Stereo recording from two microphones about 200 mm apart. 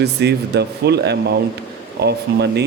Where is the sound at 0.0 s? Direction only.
55° right (ahead or behind).